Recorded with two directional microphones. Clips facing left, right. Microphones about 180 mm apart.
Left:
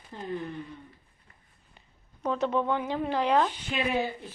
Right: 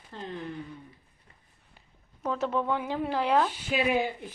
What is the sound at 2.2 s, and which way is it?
Speech, centre (ahead or behind).